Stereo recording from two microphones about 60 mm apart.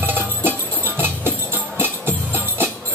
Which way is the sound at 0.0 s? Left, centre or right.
Right.